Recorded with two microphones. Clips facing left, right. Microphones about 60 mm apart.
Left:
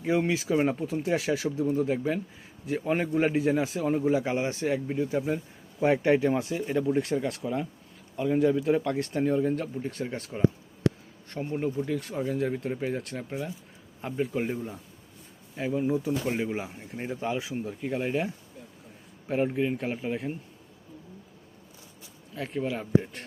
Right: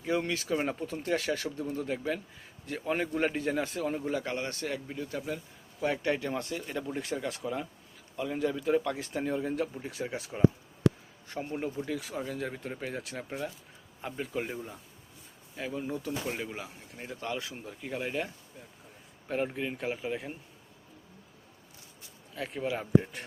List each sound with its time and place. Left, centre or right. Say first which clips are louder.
0.0 s a man's voice: left 5 dB; centre
16.6 s a man's voice: left 7 dB; left; by 18.3 s centre
19.3 s speech: left 6 dB; centre
22.4 s speech: left 2 dB; centre